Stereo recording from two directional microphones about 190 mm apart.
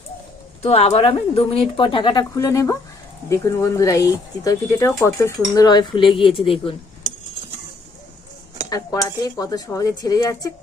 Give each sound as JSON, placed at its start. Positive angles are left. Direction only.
{"t": 0.6, "sound": "a woman's voice", "side_deg": 35}
{"t": 8.7, "sound": "a woman's voice", "side_deg": 20}